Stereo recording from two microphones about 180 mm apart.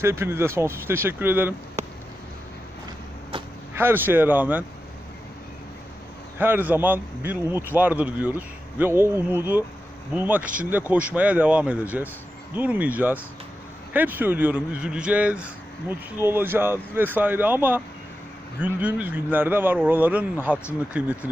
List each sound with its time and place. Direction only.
0.0 s speech: 15° right (ahead or behind)
1.8 s a sound: 40° right (ahead or behind)
3.8 s speech: 10° right (ahead or behind)
6.4 s speech: 10° right (ahead or behind)